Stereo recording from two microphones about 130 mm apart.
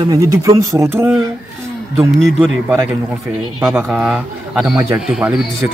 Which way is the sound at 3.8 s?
5° right (ahead or behind).